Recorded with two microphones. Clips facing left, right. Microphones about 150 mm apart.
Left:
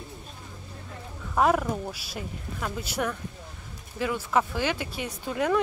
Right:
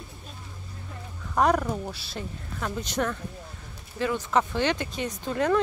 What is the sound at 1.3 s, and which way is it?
Speech, centre (ahead or behind).